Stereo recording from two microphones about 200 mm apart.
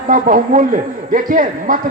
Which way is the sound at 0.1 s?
40° right (ahead or behind).